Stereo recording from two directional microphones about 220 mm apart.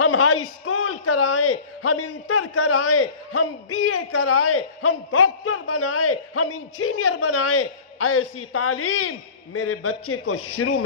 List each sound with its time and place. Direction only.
0.0 s a man's voice: 90° left